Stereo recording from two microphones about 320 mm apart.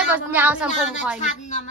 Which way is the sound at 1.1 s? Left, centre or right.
Left.